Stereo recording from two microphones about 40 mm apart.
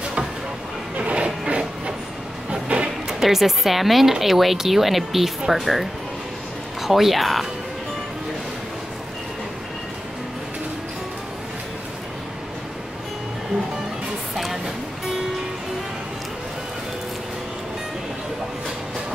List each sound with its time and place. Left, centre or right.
0.9 s a sound: right
1.5 s train: right
2.7 s music: right
3.1 s speech: centre
14.3 s music: centre